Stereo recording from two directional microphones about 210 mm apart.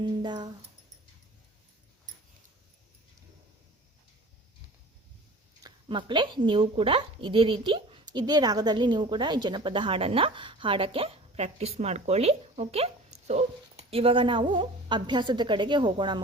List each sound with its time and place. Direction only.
0.0 s a woman's voice: 20° right (ahead or behind)
5.6 s a woman's voice: 20° right (ahead or behind)